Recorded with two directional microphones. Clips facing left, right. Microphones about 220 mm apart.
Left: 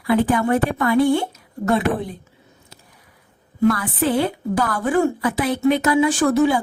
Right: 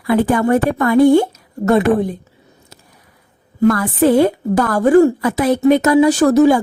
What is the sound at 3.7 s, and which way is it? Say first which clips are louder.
A woman's voice: right 7 dB; 45° right (ahead or behind).